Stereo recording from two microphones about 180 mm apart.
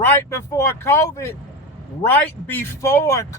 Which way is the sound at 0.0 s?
15° left (ahead or behind).